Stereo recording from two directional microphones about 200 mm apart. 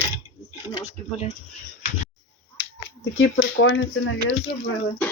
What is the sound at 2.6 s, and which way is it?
Speech, 70° left (ahead or behind).